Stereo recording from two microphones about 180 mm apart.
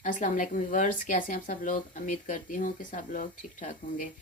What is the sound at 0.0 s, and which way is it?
Speech, 45° left (ahead or behind).